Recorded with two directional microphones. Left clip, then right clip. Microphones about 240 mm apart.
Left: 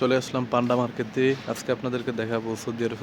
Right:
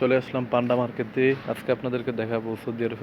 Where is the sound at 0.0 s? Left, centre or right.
Centre.